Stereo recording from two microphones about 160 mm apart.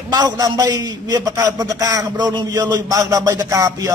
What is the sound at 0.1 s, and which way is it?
A man's voice, 25° right (ahead or behind).